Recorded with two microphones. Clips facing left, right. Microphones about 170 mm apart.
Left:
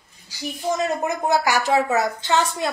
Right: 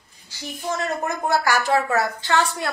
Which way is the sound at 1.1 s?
20° left (ahead or behind).